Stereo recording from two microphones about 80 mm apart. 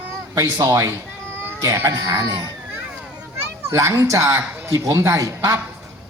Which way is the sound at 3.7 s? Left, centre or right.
Right.